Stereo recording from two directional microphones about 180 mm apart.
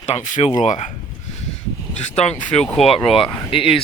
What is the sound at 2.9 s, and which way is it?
Speech, 30° left (ahead or behind).